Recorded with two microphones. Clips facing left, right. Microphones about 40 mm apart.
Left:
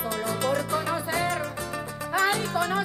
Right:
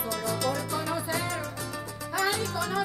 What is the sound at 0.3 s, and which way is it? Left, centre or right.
Music, left.